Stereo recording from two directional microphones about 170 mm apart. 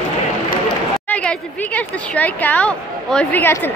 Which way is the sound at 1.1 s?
10° left (ahead or behind).